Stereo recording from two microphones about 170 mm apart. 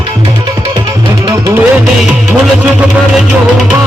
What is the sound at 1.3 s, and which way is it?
Music, 20° right (ahead or behind).